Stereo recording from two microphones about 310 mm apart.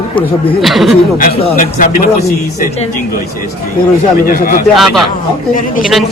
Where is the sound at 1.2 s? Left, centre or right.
Left.